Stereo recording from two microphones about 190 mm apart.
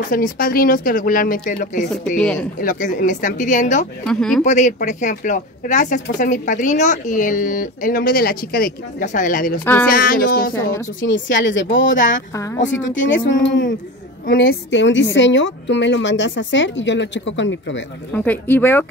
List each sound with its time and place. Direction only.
0.1 s speech: 45° left (ahead or behind)
2.1 s speech: 5° left (ahead or behind)
2.6 s speech: 45° left (ahead or behind)
4.0 s speech: 5° left (ahead or behind)
4.5 s speech: 40° left (ahead or behind)
11.0 s speech: 75° left (ahead or behind)
14.2 s a woman's voice: 50° left (ahead or behind); by 17.8 s 70° left (ahead or behind)
18.1 s speech: 10° left (ahead or behind)